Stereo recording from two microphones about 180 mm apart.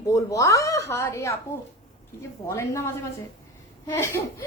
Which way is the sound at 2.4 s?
15° left (ahead or behind).